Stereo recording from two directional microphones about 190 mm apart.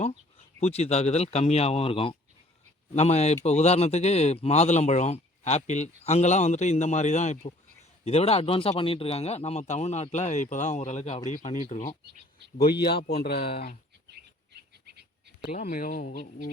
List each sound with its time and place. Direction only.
0.6 s speech: 35° left (ahead or behind)
13.1 s speech: 55° left (ahead or behind)
13.4 s speech: 30° left (ahead or behind)
14.5 s bird: 60° right (ahead or behind)
15.5 s speech: 40° left (ahead or behind)